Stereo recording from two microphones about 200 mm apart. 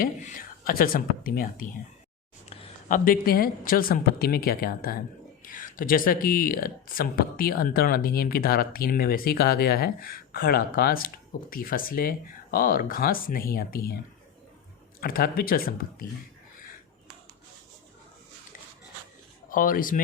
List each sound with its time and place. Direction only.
0.0 s speech: 45° left (ahead or behind)
2.9 s speech: 45° left (ahead or behind)
15.0 s speech: 45° left (ahead or behind)
19.5 s speech: 45° left (ahead or behind)